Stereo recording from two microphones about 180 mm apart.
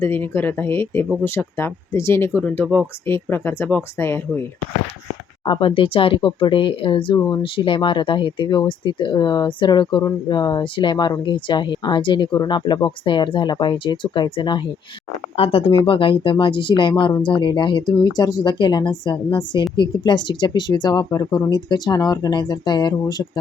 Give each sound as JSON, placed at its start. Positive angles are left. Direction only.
{"t": 0.0, "sound": "speech", "side_deg": 10}
{"t": 5.5, "sound": "speech", "side_deg": 30}